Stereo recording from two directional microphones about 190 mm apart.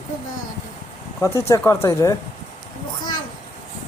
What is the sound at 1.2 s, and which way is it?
Speech, 15° left (ahead or behind).